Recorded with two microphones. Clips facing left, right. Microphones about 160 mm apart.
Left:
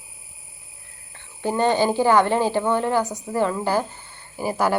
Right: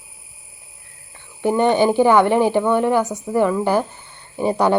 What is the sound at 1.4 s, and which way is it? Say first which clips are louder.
Speech: right 4 dB; 15° right (ahead or behind).